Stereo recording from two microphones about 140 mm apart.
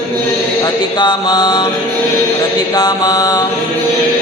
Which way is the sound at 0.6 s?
30° left (ahead or behind).